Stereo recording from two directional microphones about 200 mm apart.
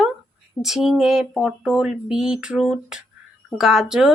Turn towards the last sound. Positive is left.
turn(degrees=-5)  # may be behind; listen again after turning